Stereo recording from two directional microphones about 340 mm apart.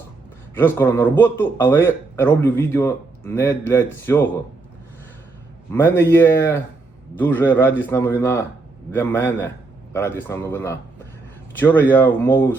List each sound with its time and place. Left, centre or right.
0.5 s a man's voice: centre
5.7 s a man's voice: centre